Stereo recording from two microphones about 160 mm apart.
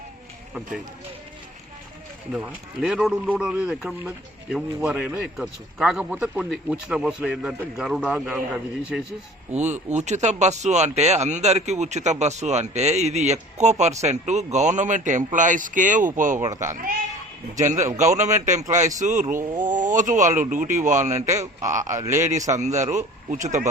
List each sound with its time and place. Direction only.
2.3 s speech: 5° right (ahead or behind)
9.5 s speech: 45° right (ahead or behind)
16.4 s a man's voice: 20° right (ahead or behind)
16.6 s speech: 55° right (ahead or behind)
21.2 s a man's voice: 20° right (ahead or behind)
22.5 s speech: 45° right (ahead or behind)